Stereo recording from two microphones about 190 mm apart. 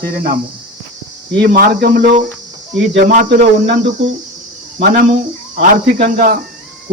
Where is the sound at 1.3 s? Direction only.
60° right (ahead or behind).